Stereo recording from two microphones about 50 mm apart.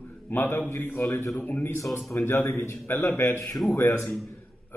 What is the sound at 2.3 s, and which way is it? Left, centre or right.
A man's voice, left.